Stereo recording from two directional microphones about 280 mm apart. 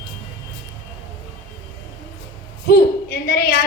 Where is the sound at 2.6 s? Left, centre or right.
Left.